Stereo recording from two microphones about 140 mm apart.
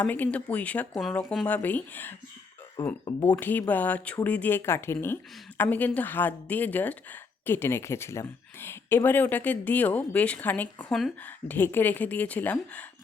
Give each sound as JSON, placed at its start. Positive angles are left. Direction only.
{"t": 0.0, "sound": "speech", "side_deg": 10}
{"t": 1.5, "sound": "speech", "side_deg": 10}
{"t": 10.8, "sound": "speech", "side_deg": 0}
{"t": 11.4, "sound": "speech", "side_deg": 15}